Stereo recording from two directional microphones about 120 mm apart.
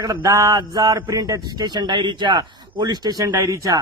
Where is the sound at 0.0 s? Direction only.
30° right (ahead or behind).